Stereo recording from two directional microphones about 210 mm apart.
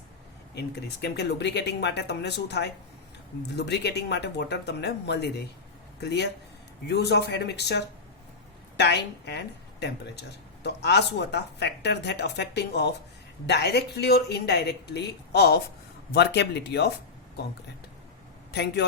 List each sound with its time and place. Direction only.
0.5 s speech: 50° left (ahead or behind)
18.5 s speech: 55° left (ahead or behind)